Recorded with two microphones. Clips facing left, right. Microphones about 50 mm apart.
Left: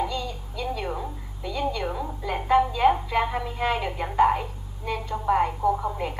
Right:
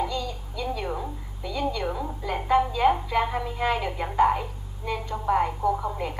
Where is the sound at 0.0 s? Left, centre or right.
Centre.